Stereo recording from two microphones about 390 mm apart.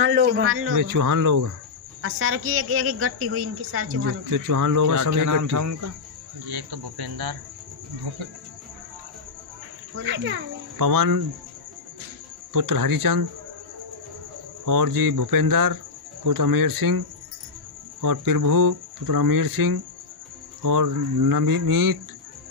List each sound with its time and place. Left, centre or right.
0.0 s a man's voice: right
0.7 s speech: right
2.0 s a woman's voice: right
4.3 s speech: right
6.4 s speech: right
10.0 s a child's voice: right
10.8 s speech: right
12.5 s speech: right
14.6 s speech: right
18.0 s speech: right